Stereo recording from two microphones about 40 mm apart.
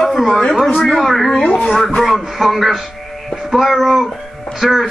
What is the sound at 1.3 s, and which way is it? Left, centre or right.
Speech, left.